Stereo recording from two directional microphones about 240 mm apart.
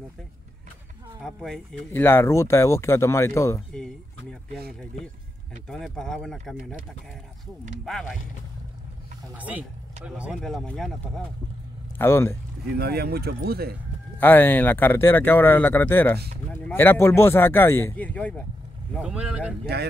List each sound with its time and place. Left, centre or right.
1.2 s speech: centre
5.7 s speech: centre
7.8 s speech: centre
9.4 s speech: centre
12.0 s speech: centre
12.7 s speech: right
14.2 s speech: centre
19.6 s speech: right